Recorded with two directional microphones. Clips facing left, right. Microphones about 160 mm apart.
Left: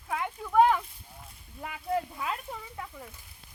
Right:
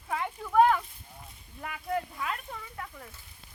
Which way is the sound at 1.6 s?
15° left (ahead or behind).